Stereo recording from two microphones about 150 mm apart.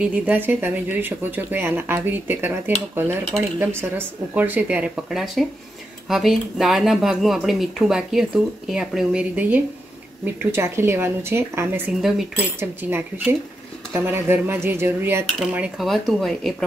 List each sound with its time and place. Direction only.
0.0 s speech: 10° right (ahead or behind)
15.5 s speech: 5° right (ahead or behind)